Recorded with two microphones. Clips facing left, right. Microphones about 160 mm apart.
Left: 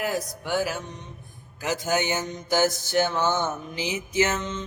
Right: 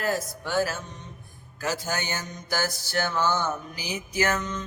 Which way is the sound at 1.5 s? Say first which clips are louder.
Left 4 dB; 20° left (ahead or behind).